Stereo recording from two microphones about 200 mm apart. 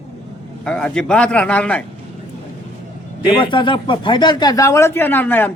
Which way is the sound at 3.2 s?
25° left (ahead or behind).